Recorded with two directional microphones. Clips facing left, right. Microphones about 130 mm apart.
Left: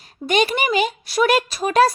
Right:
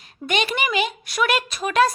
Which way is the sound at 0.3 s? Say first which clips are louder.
Left 4 dB; 40° left (ahead or behind).